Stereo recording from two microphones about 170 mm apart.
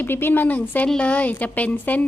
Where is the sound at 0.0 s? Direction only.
10° left (ahead or behind).